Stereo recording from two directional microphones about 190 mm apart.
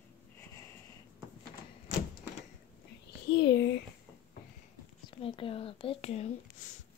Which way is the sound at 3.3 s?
70° left (ahead or behind).